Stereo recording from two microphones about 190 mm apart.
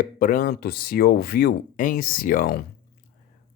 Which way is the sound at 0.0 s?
45° left (ahead or behind).